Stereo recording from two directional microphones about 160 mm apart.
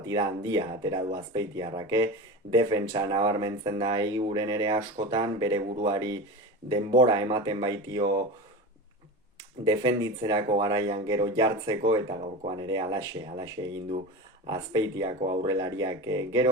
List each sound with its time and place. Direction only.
0.0 s speech: 25° right (ahead or behind)
9.6 s speech: 25° right (ahead or behind)